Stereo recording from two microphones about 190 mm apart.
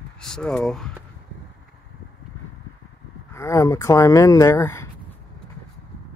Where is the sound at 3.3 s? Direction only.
15° left (ahead or behind).